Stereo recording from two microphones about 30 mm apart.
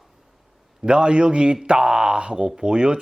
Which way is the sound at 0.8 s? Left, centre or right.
Right.